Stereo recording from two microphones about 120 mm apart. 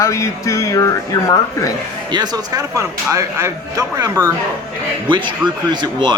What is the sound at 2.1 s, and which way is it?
Speech, 35° right (ahead or behind).